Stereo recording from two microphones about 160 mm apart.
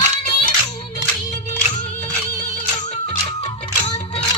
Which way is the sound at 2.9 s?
35° left (ahead or behind).